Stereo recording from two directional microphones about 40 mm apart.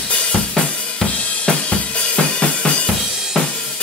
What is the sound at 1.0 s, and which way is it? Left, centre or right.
Drum, left.